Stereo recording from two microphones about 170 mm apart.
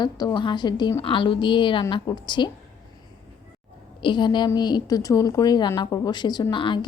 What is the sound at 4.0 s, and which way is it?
Speech, 30° left (ahead or behind).